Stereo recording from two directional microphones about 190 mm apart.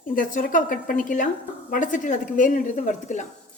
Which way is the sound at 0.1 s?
45° left (ahead or behind).